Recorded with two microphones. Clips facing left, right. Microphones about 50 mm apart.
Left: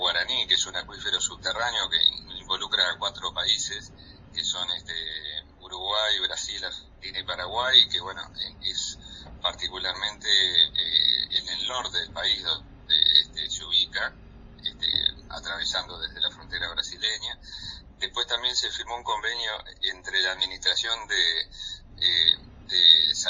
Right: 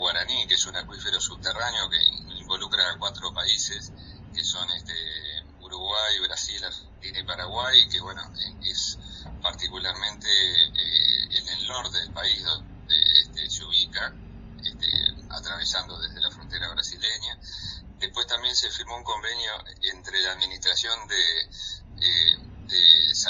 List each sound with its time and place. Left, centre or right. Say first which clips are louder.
0.0 s a man's voice: left 1 dB; centre
13.0 s a sound: right 2 dB; centre
13.7 s a man's voice: even; centre